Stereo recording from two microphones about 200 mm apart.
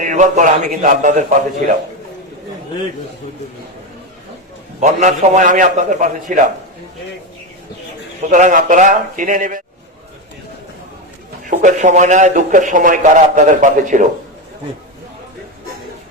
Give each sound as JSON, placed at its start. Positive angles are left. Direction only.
{"t": 0.0, "sound": "a man's voice", "side_deg": -40}
{"t": 4.8, "sound": "a man's voice", "side_deg": -35}
{"t": 8.3, "sound": "a man's voice", "side_deg": -40}
{"t": 11.4, "sound": "a man's voice", "side_deg": -40}